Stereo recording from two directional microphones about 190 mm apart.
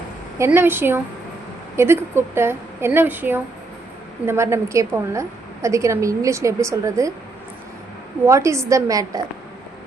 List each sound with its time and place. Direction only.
0.3 s a woman's voice: 15° right (ahead or behind)
8.3 s a woman's voice: 15° right (ahead or behind)